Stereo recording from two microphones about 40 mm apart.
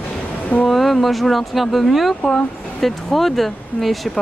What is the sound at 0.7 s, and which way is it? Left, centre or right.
Speech, centre.